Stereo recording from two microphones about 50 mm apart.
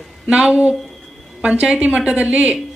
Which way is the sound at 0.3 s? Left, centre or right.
Centre.